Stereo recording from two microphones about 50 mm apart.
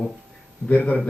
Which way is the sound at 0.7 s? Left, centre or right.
Left.